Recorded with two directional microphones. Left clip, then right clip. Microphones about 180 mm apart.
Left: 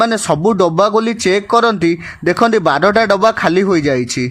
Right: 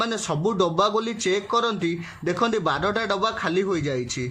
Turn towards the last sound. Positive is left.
turn(degrees=40)  # may be behind; listen again after turning